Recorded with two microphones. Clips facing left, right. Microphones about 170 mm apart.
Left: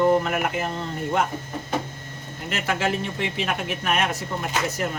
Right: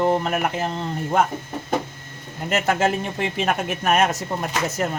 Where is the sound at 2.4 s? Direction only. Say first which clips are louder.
Right 5 dB; 45° right (ahead or behind).